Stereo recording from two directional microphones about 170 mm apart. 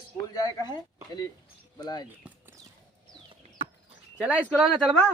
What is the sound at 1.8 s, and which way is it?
Speech, 25° left (ahead or behind).